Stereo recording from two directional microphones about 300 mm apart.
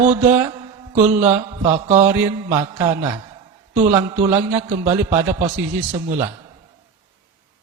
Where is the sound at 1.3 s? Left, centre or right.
Centre.